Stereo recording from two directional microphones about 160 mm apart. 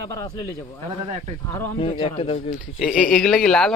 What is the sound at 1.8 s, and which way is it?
Speech, 35° left (ahead or behind).